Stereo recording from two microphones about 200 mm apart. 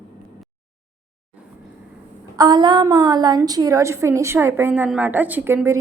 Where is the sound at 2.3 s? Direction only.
20° right (ahead or behind).